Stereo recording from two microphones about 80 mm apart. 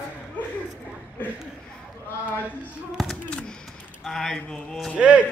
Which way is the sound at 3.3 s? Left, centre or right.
Centre.